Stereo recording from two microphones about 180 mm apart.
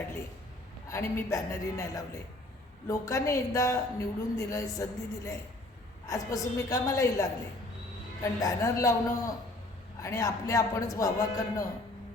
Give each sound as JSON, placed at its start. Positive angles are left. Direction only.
{"t": 0.9, "sound": "a man's voice", "side_deg": 15}